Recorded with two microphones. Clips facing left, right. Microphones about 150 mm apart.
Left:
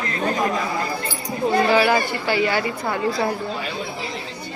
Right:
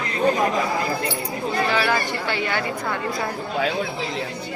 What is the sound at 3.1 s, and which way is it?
Speech, 30° left (ahead or behind).